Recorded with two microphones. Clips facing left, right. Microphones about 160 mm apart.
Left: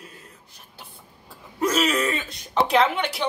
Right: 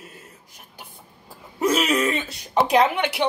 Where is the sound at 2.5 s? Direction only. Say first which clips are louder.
Right 2 dB; 15° right (ahead or behind).